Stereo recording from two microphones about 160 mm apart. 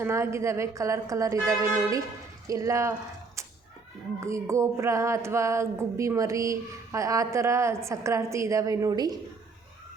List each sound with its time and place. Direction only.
0.0 s music: 15° right (ahead or behind)
4.2 s music: 20° right (ahead or behind)